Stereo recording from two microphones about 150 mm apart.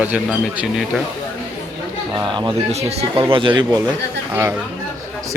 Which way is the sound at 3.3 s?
35° right (ahead or behind).